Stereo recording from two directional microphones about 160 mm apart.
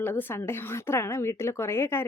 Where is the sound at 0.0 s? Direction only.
10° left (ahead or behind).